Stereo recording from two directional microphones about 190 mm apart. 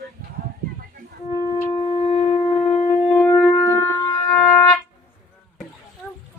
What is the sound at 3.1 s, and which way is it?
Shofar, 10° left (ahead or behind).